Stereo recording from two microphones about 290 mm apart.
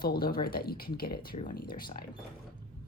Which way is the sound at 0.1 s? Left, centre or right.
Left.